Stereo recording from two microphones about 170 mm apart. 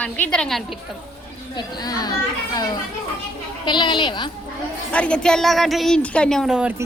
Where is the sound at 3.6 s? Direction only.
25° left (ahead or behind).